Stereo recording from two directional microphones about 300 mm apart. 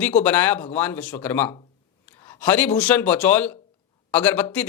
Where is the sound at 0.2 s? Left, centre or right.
Centre.